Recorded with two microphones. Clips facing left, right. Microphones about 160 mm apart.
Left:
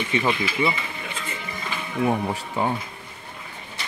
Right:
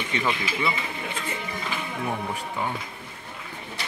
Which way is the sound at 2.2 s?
35° left (ahead or behind).